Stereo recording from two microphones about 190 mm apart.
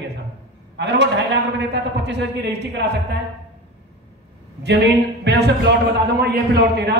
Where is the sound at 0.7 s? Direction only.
65° right (ahead or behind).